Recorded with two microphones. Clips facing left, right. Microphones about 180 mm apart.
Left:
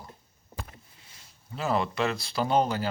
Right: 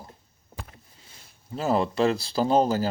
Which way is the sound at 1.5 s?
35° right (ahead or behind).